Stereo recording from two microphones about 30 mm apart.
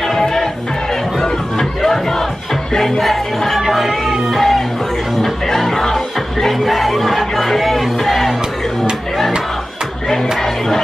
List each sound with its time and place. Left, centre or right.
0.1 s music: centre
1.8 s battle cry: centre
3.0 s music: centre
6.7 s speech: centre
7.4 s music: centre